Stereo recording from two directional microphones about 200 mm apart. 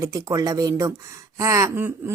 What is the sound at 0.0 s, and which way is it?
Speech, 15° right (ahead or behind).